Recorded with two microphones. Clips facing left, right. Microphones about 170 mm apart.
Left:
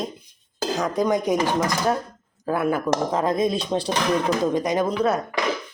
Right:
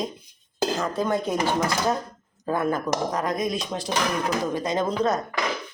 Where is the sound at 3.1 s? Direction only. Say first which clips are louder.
Left 4 dB; 25° left (ahead or behind).